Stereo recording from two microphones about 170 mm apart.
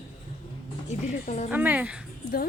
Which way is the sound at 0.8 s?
45° left (ahead or behind).